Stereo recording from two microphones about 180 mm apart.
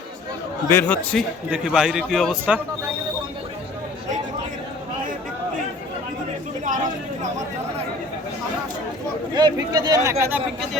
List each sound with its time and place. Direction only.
0.7 s a man's voice: 10° left (ahead or behind)
1.5 s a man's voice: 5° right (ahead or behind)
9.3 s speech: 25° right (ahead or behind)